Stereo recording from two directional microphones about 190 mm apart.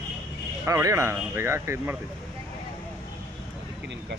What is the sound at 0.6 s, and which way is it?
Speech, 15° right (ahead or behind).